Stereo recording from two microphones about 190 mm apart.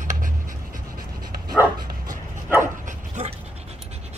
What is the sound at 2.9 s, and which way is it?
Dog, 35° right (ahead or behind).